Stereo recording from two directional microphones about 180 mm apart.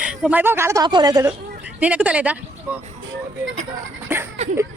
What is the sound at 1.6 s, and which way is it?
Speech, 5° right (ahead or behind).